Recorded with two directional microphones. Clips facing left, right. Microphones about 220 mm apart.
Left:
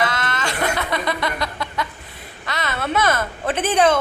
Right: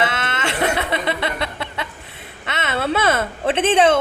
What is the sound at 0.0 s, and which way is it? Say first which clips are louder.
Chuckle: right 1 dB; 25° right (ahead or behind).